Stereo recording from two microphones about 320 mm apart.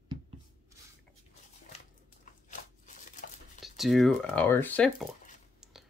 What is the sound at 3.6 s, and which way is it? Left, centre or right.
Speech, centre.